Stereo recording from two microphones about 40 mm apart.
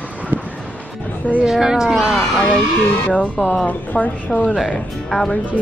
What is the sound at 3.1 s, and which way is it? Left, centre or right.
Speech, left.